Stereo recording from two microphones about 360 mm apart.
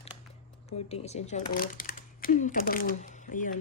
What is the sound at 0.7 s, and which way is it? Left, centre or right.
Speech, centre.